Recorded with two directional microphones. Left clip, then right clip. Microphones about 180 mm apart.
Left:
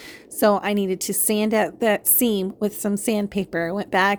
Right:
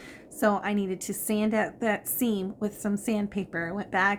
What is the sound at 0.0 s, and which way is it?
A woman's voice, 45° left (ahead or behind).